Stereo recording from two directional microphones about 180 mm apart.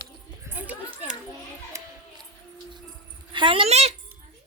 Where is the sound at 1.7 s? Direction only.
15° right (ahead or behind).